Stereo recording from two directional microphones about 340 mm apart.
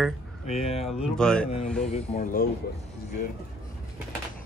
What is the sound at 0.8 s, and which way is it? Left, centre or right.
Speech, centre.